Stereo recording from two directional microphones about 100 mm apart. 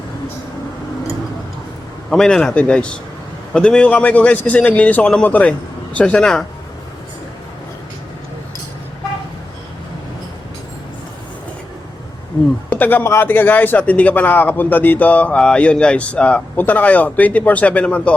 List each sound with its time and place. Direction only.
2.0 s speech: 5° left (ahead or behind)
12.7 s speech: 20° left (ahead or behind)